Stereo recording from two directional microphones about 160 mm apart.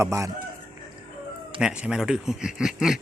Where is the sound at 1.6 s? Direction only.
5° right (ahead or behind).